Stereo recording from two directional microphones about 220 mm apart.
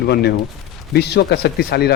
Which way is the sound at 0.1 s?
45° left (ahead or behind).